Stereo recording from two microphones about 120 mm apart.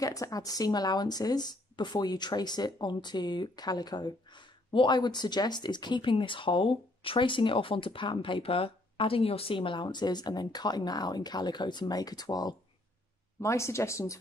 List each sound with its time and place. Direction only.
0.0 s speech: 30° left (ahead or behind)
13.4 s speech: 25° left (ahead or behind)